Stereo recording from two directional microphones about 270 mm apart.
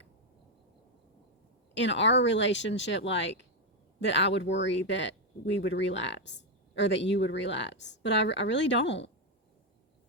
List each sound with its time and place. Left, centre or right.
1.7 s speech: left